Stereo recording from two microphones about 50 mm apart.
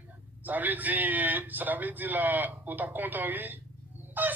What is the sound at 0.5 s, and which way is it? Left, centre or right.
Speech, right.